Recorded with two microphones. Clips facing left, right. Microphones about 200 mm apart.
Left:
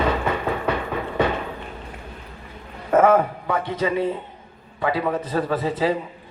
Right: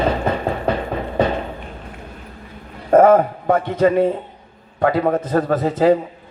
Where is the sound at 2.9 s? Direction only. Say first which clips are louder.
Right 5 dB; 35° right (ahead or behind).